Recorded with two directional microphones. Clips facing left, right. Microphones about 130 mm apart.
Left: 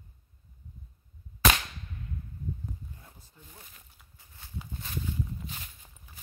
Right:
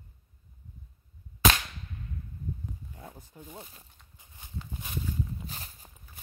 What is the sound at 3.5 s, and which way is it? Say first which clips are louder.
Speech: right 8 dB; 30° right (ahead or behind).